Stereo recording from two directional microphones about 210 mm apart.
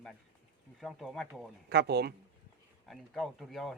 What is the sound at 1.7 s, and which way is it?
Speech, 50° right (ahead or behind).